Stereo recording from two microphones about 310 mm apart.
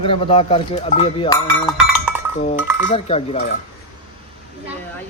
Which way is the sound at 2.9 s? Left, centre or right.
Centre.